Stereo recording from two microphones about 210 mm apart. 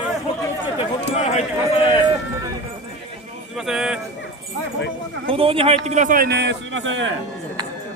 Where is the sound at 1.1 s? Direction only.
30° left (ahead or behind).